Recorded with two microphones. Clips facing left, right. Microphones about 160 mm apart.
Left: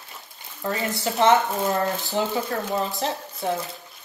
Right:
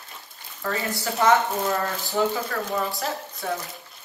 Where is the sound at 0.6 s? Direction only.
20° left (ahead or behind).